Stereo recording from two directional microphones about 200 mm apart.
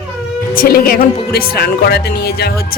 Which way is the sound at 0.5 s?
45° left (ahead or behind).